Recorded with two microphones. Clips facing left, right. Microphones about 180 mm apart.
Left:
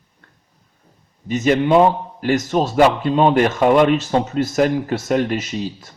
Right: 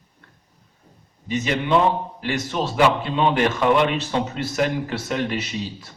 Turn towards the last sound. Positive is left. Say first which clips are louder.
# left 4 dB
turn(degrees=45)  # may be behind; listen again after turning